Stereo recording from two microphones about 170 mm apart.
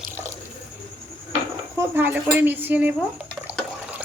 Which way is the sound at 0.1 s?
15° right (ahead or behind).